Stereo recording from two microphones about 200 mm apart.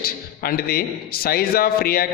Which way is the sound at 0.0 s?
50° left (ahead or behind).